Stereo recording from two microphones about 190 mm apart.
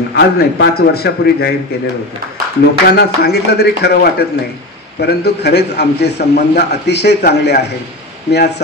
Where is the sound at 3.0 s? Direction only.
60° left (ahead or behind).